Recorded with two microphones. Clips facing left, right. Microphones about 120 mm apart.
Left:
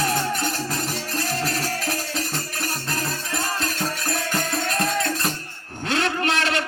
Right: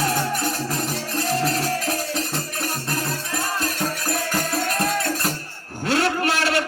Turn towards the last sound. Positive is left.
turn(degrees=25)  # may be behind; listen again after turning